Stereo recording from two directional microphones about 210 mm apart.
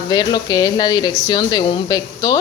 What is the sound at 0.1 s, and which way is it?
Speech, 20° left (ahead or behind).